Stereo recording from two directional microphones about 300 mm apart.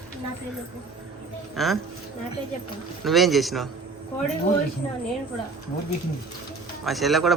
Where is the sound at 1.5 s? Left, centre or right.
Centre.